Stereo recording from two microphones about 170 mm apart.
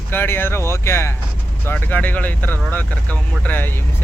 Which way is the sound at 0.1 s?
10° left (ahead or behind).